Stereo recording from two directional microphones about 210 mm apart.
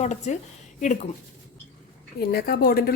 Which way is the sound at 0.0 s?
35° left (ahead or behind).